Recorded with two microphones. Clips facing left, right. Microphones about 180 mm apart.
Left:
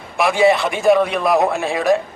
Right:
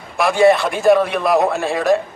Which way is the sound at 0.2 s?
Centre (ahead or behind).